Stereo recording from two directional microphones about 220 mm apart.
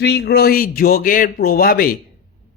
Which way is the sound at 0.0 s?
50° left (ahead or behind).